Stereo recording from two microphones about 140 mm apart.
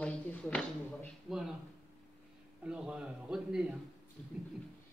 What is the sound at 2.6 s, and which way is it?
A man's voice, 5° right (ahead or behind).